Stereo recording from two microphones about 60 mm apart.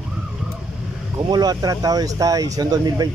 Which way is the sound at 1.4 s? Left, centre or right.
Right.